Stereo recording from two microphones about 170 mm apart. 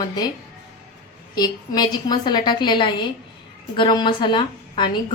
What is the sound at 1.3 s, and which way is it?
A woman's voice, 25° left (ahead or behind).